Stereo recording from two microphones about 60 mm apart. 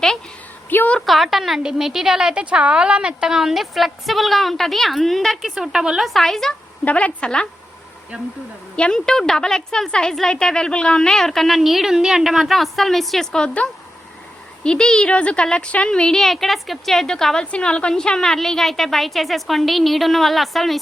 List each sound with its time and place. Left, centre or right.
0.7 s a woman's voice: left
1.0 s a woman's voice: centre
5.4 s a woman's voice: centre
6.0 s a woman's voice: centre
6.8 s a woman's voice: left
8.7 s a woman's voice: centre
9.0 s a woman's voice: centre
16.1 s a woman's voice: centre